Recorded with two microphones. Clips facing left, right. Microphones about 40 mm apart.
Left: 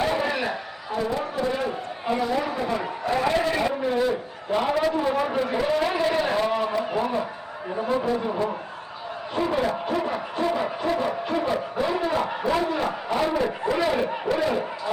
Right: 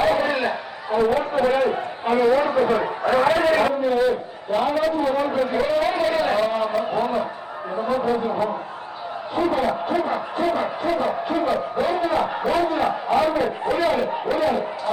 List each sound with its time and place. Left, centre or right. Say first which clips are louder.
0.0 s a sound: right 4 dB; centre
1.0 s a man's voice: right 7 dB; right
2.1 s a man's voice: right 8 dB; centre
2.6 s a man's voice: right 7 dB; right
3.8 s a man's voice: right 4 dB; centre
8.0 s a man's voice: right 3 dB; centre
9.3 s a man's voice: right 3 dB; centre